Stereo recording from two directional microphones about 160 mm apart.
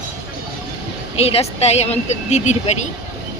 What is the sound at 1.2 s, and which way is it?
Speech, 40° left (ahead or behind).